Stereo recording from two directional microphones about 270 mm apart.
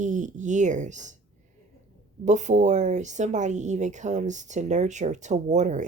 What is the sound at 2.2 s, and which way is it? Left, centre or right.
Speech, right.